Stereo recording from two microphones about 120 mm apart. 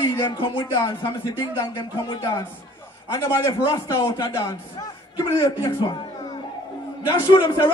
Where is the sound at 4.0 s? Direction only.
40° left (ahead or behind).